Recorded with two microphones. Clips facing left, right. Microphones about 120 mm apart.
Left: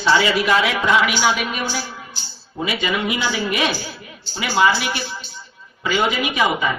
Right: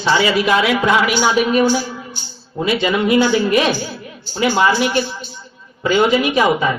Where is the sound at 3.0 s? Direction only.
40° right (ahead or behind).